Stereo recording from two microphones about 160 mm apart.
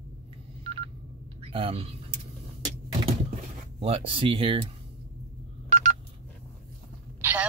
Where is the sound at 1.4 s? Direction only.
35° right (ahead or behind).